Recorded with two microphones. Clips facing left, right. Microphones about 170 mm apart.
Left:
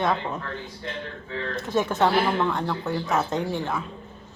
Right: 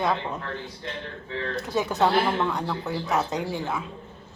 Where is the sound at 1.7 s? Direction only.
Centre (ahead or behind).